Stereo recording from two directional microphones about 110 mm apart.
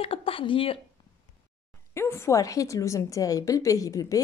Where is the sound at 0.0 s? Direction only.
55° left (ahead or behind).